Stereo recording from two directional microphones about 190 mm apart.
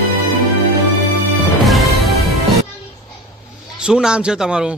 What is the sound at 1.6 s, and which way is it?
Music, centre (ahead or behind).